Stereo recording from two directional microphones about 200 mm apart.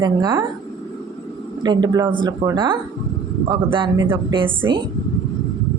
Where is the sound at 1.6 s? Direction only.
20° right (ahead or behind).